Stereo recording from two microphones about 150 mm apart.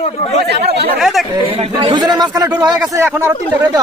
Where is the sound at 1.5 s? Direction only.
45° right (ahead or behind).